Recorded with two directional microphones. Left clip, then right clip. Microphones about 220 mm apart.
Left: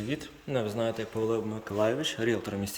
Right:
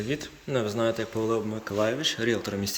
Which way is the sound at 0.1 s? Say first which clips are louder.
Right 2 dB; 10° left (ahead or behind).